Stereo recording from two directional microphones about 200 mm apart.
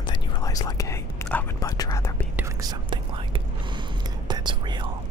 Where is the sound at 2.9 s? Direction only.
25° right (ahead or behind).